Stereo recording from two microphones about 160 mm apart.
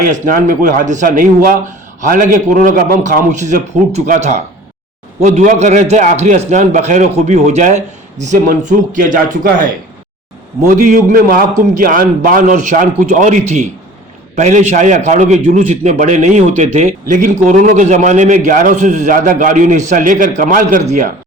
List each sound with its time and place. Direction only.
0.0 s a man's voice: 55° right (ahead or behind)
10.8 s a man's voice: 55° right (ahead or behind)